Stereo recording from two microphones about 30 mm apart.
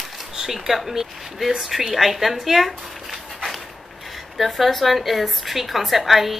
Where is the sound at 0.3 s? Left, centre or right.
Centre.